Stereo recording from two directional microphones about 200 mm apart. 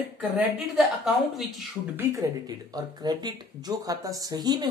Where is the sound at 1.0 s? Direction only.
Centre (ahead or behind).